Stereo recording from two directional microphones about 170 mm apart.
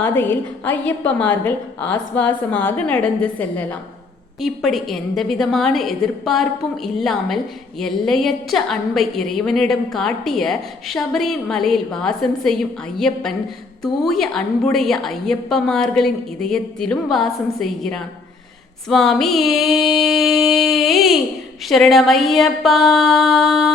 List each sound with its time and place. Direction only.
0.0 s a woman's voice: 10° left (ahead or behind)